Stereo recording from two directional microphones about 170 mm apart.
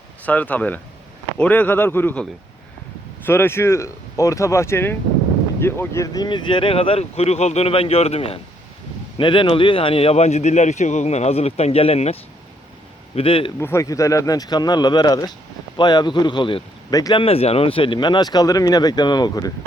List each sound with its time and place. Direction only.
0.3 s speech: 10° left (ahead or behind)
3.2 s a man's voice: 15° left (ahead or behind); by 12.1 s 35° left (ahead or behind)
13.1 s a man's voice: 30° left (ahead or behind)
13.6 s speech: 15° left (ahead or behind)